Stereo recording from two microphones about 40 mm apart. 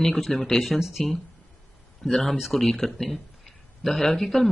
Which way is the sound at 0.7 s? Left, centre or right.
Centre.